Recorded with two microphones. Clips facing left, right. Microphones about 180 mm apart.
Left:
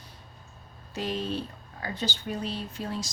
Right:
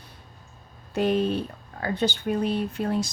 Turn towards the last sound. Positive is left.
turn(degrees=-60)  # may be behind; listen again after turning